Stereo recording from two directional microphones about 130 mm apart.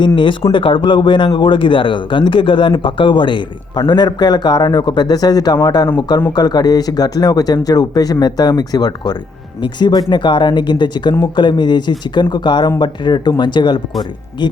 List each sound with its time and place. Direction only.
0.0 s speech: 40° left (ahead or behind)